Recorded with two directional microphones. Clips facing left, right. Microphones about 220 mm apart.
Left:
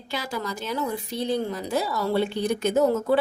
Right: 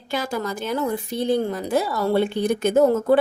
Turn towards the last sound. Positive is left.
turn(degrees=-50)  # may be behind; listen again after turning